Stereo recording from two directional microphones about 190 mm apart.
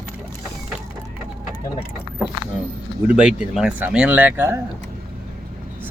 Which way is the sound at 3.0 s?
5° right (ahead or behind).